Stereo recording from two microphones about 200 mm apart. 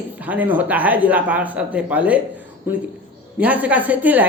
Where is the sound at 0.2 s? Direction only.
10° right (ahead or behind).